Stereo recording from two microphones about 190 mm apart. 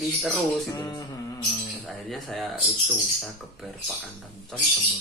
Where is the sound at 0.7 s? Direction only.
20° left (ahead or behind).